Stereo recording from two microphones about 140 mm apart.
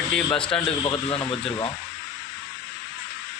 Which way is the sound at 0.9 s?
40° left (ahead or behind).